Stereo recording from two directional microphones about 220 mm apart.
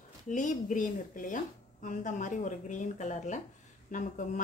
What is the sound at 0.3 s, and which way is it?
A woman's voice, 35° left (ahead or behind).